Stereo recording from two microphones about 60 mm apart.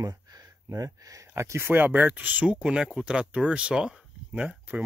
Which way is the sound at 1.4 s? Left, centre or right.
Right.